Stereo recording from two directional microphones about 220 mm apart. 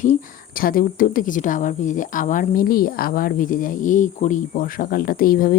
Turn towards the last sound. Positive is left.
turn(degrees=40)  # may be behind; listen again after turning